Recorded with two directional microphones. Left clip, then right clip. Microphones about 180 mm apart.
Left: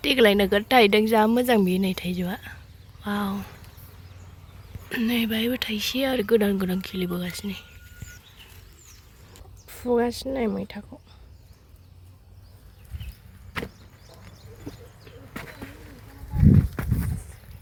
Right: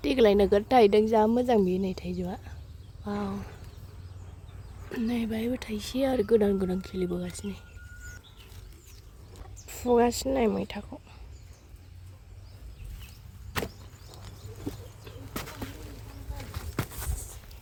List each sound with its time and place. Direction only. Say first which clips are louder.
0.0 s speech: left 3 dB; 5° right (ahead or behind)
4.9 s speech: left 6 dB; centre (ahead or behind)
9.6 s speech: even; 5° right (ahead or behind)
15.0 s bird flight: even; 15° right (ahead or behind)
16.5 s a sound: left 12 dB; 5° right (ahead or behind)